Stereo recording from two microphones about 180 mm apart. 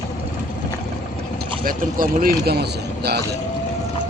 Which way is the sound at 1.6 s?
50° right (ahead or behind).